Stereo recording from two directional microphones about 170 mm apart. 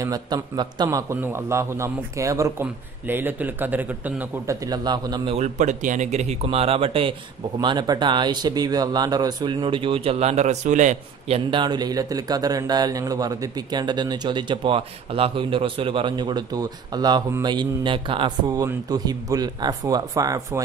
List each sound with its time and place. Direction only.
0.0 s a man's voice: 25° right (ahead or behind)
4.5 s a man's voice: 25° right (ahead or behind)